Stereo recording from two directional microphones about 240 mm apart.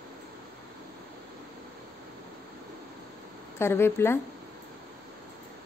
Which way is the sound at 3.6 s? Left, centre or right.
Centre.